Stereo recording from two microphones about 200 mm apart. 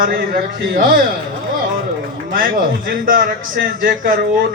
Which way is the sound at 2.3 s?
45° right (ahead or behind).